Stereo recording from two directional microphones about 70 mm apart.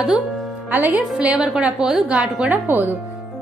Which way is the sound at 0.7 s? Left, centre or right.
Right.